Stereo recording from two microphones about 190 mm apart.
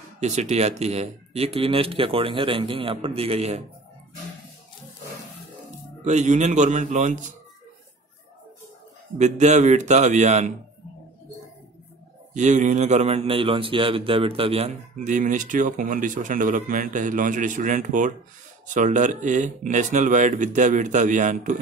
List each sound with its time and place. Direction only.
0.2 s speech: 35° right (ahead or behind)
6.0 s speech: 40° right (ahead or behind)
9.2 s speech: 40° right (ahead or behind)
12.4 s a man's voice: 40° right (ahead or behind)
15.1 s speech: 45° right (ahead or behind)